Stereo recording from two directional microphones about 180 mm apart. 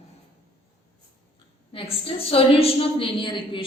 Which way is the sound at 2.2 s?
35° left (ahead or behind).